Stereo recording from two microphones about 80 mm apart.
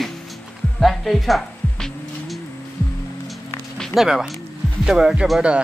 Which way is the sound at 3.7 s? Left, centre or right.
Centre.